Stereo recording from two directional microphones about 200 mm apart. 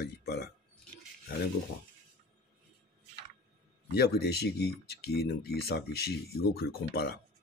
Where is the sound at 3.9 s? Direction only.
55° left (ahead or behind).